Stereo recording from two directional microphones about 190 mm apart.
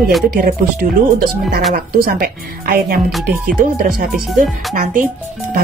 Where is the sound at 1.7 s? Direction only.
50° right (ahead or behind).